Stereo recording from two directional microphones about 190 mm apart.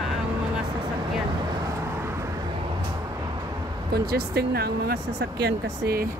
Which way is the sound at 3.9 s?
55° right (ahead or behind).